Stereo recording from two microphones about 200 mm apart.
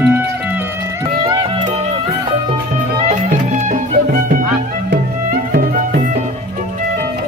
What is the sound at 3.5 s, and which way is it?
Music, 40° right (ahead or behind).